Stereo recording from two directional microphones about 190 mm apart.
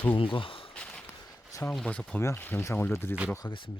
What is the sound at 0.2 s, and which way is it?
Speech, 25° left (ahead or behind).